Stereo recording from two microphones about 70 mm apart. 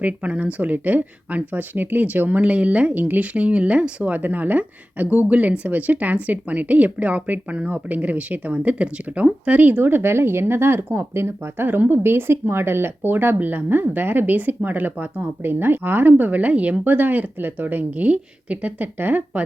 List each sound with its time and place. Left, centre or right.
0.0 s speech: centre